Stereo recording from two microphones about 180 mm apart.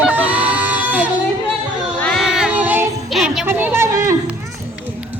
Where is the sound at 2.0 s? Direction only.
5° left (ahead or behind); by 4.1 s 15° right (ahead or behind).